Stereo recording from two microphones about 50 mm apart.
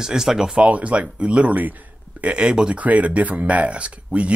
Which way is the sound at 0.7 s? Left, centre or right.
Right.